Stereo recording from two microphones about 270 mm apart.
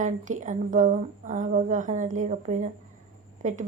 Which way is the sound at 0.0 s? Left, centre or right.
Right.